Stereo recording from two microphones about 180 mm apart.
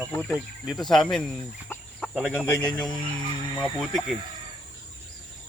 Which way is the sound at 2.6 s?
20° left (ahead or behind).